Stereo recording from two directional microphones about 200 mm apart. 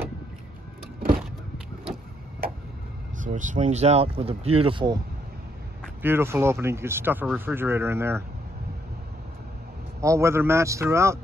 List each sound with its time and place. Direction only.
3.2 s speech: 40° right (ahead or behind)
6.0 s speech: 10° right (ahead or behind)
10.0 s speech: 15° right (ahead or behind)